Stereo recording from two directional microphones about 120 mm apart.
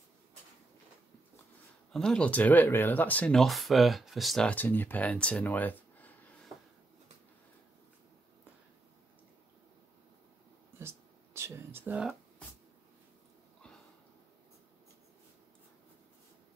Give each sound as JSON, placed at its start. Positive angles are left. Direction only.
{"t": 1.9, "sound": "speech", "side_deg": 5}
{"t": 3.3, "sound": "speech", "side_deg": 0}
{"t": 4.5, "sound": "speech", "side_deg": 15}
{"t": 10.8, "sound": "a sound", "side_deg": -20}